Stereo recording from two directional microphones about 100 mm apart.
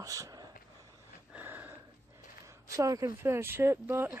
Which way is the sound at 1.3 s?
20° right (ahead or behind).